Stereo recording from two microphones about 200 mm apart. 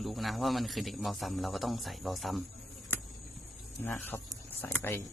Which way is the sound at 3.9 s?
10° left (ahead or behind).